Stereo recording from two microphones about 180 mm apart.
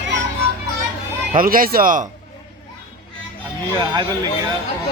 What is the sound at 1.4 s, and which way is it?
Speech, 50° right (ahead or behind).